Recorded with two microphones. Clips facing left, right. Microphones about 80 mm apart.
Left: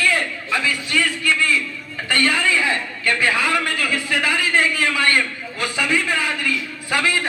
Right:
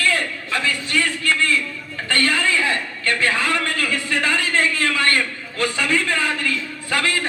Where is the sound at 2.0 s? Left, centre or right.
Centre.